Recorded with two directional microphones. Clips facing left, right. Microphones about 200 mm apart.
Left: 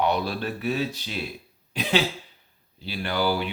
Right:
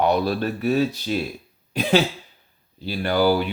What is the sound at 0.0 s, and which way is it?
Speech, 45° right (ahead or behind).